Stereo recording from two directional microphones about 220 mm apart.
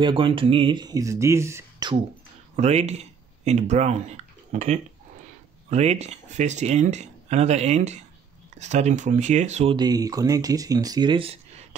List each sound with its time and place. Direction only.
0.0 s speech: 25° right (ahead or behind)
2.5 s speech: 30° right (ahead or behind)
9.8 s speech: 15° right (ahead or behind)